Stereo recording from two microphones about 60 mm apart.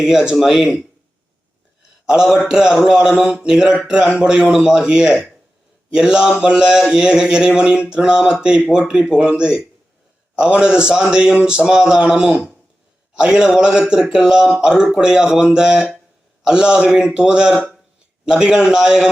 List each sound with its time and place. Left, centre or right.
0.3 s speech: centre
2.0 s speech: centre